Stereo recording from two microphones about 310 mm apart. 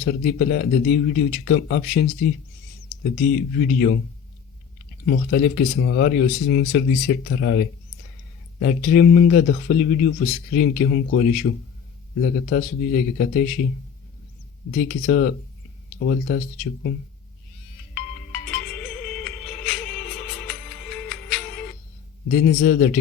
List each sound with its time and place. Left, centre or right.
0.0 s speech: left
3.2 s speech: left
5.0 s speech: left
14.7 s speech: left
18.3 s music: centre
22.3 s speech: left